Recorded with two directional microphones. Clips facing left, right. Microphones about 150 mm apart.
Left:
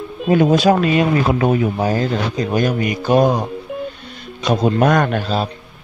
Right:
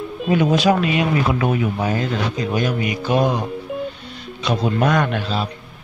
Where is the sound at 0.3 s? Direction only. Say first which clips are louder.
Left 3 dB; 40° left (ahead or behind).